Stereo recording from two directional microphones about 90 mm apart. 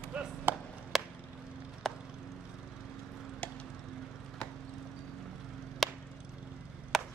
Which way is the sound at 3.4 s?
15° left (ahead or behind).